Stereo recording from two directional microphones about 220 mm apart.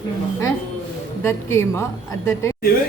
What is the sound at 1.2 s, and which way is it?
Speech, 10° left (ahead or behind).